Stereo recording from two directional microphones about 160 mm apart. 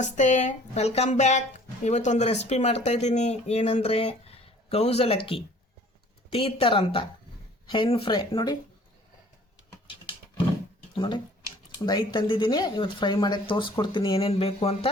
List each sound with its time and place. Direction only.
0.0 s speech: 50° left (ahead or behind); by 8.5 s 30° left (ahead or behind)
10.9 s speech: 30° left (ahead or behind)